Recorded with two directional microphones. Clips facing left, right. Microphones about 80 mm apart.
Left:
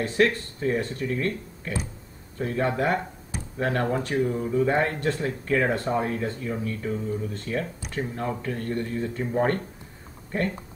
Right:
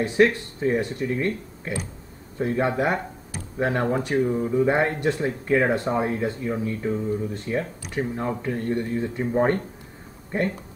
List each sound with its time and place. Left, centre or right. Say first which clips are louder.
0.0 s speech: right 3 dB; centre